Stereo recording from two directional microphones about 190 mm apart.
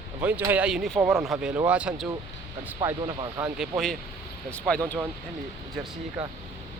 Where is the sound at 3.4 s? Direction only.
Centre (ahead or behind).